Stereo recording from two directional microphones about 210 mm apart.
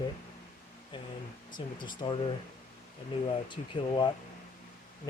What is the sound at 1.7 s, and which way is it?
Speech, 20° left (ahead or behind).